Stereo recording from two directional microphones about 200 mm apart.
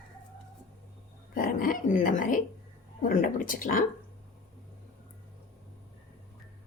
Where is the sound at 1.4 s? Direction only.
45° left (ahead or behind).